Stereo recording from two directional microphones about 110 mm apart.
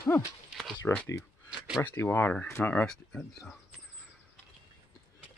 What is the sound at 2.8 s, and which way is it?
Speech, 5° left (ahead or behind).